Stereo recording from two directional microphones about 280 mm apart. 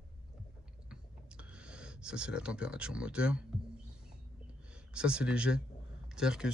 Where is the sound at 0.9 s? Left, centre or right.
Centre.